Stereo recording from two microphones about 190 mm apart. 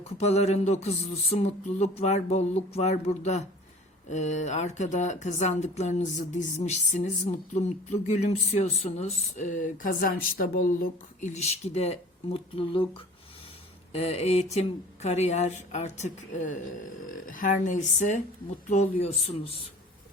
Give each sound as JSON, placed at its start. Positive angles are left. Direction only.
{"t": 0.2, "sound": "speech", "side_deg": 35}
{"t": 13.9, "sound": "speech", "side_deg": 35}